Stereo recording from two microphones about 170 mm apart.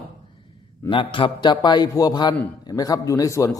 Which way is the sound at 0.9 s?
30° left (ahead or behind).